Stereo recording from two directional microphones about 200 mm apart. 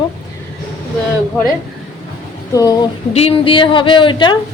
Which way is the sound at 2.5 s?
20° left (ahead or behind).